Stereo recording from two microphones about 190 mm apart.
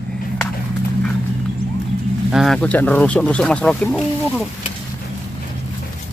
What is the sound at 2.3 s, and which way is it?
Speech, centre (ahead or behind).